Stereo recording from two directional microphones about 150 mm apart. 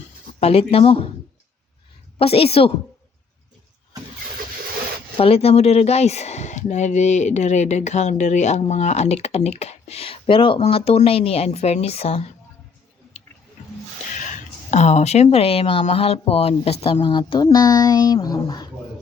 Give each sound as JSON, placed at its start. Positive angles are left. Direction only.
{"t": 0.3, "sound": "speech", "side_deg": 45}
{"t": 2.1, "sound": "speech", "side_deg": 40}
{"t": 5.1, "sound": "speech", "side_deg": 40}
{"t": 14.7, "sound": "speech", "side_deg": 50}